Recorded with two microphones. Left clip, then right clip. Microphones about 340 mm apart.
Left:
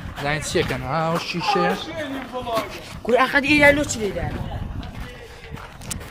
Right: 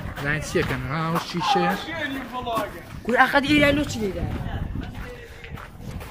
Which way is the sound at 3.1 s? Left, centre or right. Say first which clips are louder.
Left 1 dB; centre.